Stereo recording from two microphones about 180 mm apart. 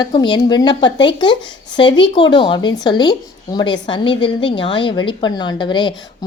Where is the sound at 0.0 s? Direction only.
25° left (ahead or behind).